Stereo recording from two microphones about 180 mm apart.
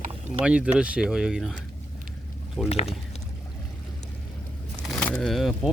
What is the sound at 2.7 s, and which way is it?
Speech, 35° left (ahead or behind).